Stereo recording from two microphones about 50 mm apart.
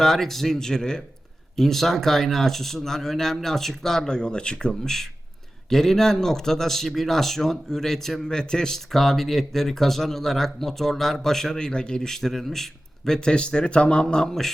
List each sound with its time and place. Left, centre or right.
0.0 s speech: centre
13.1 s speech: centre